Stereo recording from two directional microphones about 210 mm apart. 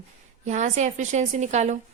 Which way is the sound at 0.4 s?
35° right (ahead or behind).